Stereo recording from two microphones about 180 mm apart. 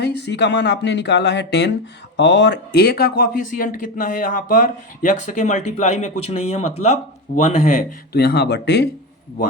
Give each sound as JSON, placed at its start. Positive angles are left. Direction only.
{"t": 0.0, "sound": "speech", "side_deg": 65}
{"t": 8.1, "sound": "speech", "side_deg": 65}